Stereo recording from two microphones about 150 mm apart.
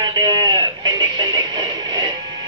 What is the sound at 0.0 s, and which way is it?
Music, 25° right (ahead or behind).